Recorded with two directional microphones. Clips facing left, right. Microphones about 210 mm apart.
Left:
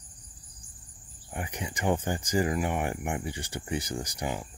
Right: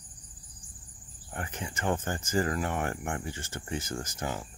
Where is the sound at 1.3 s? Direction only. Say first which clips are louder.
Left 2 dB; 15° left (ahead or behind).